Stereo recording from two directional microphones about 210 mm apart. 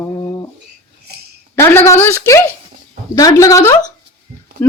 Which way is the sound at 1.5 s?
10° left (ahead or behind).